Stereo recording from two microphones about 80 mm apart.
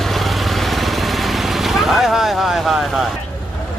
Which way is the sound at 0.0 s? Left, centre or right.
Centre.